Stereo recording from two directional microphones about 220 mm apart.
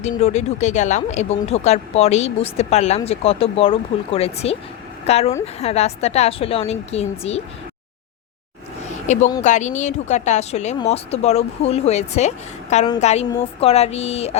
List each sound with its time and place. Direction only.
0.0 s speech: 30° left (ahead or behind)
9.1 s speech: 35° left (ahead or behind)